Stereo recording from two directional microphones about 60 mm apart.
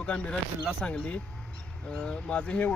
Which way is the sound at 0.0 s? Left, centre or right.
Centre.